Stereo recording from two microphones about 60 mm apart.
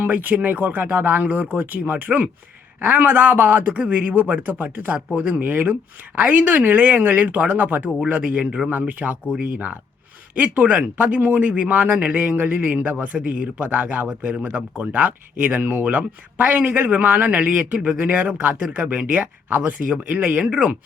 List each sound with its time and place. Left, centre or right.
0.0 s speech: right
10.3 s speech: right